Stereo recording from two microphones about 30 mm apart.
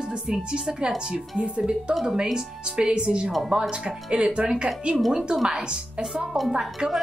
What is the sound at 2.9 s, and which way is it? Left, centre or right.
A woman's voice, right.